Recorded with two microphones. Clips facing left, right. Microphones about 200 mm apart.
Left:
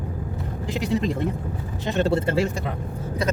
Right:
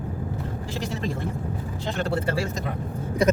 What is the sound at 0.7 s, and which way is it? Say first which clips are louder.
Speech: left 7 dB; 20° left (ahead or behind).